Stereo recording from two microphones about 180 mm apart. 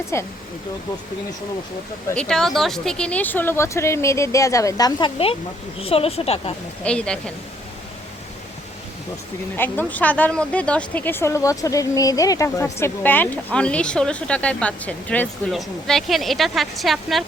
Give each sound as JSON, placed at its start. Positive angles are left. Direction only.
{"t": 0.1, "sound": "speech", "side_deg": 15}
{"t": 2.0, "sound": "speech", "side_deg": 5}
{"t": 6.8, "sound": "speech", "side_deg": 5}
{"t": 9.6, "sound": "speech", "side_deg": 10}